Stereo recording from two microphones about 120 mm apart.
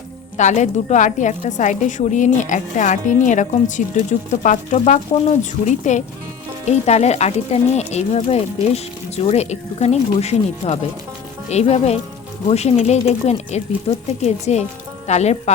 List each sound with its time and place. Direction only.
0.3 s a woman's voice: 90° left
6.7 s speech: 65° left (ahead or behind)